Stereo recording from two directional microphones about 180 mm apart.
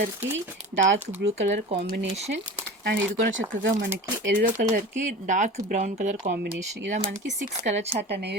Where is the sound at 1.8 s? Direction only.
60° right (ahead or behind).